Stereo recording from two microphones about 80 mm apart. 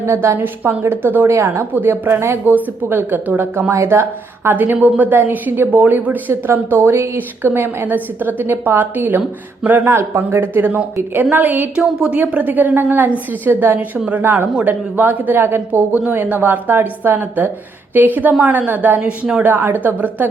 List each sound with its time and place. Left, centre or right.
0.0 s a woman's voice: right
11.8 s a woman's voice: centre
12.3 s a woman's voice: right